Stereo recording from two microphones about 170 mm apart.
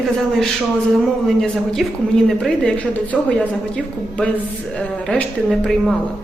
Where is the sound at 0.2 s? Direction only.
Centre (ahead or behind).